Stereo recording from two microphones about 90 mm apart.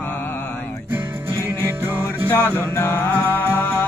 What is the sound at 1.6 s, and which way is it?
Music, 25° right (ahead or behind).